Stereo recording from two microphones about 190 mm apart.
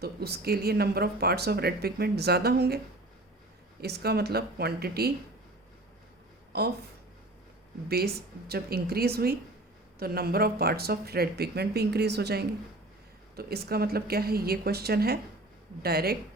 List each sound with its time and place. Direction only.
0.0 s speech: 55° right (ahead or behind)
6.5 s speech: 60° right (ahead or behind)
7.9 s speech: 55° right (ahead or behind)